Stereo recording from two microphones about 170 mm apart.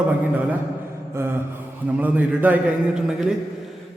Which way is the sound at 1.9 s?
10° right (ahead or behind).